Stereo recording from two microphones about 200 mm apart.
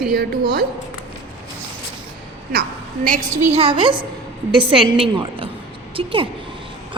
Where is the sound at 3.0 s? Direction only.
45° right (ahead or behind).